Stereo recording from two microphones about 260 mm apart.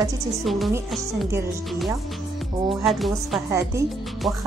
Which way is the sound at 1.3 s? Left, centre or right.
Centre.